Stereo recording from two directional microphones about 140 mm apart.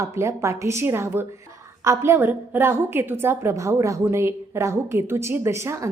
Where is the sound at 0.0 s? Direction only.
20° right (ahead or behind).